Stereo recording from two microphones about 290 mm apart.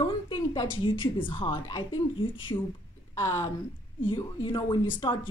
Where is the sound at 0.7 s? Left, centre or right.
Centre.